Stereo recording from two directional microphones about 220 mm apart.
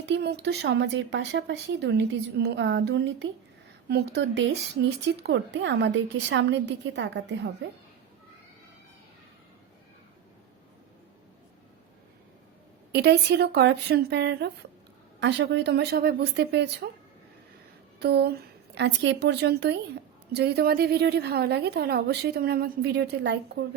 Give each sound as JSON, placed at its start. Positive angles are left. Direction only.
{"t": 0.0, "sound": "speech", "side_deg": -50}
{"t": 12.9, "sound": "speech", "side_deg": -50}
{"t": 18.0, "sound": "speech", "side_deg": -50}